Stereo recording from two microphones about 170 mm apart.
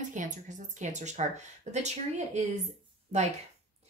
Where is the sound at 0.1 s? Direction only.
45° right (ahead or behind).